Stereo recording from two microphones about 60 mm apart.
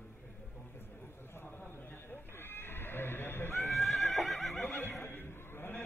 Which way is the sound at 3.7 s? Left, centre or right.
Centre.